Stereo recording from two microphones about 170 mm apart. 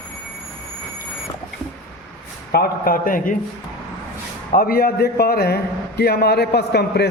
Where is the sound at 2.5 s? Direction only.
60° left (ahead or behind).